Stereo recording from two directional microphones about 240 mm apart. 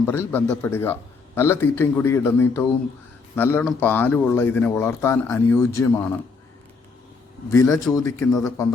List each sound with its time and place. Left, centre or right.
0.0 s speech: centre
7.5 s speech: centre
8.4 s a man's voice: centre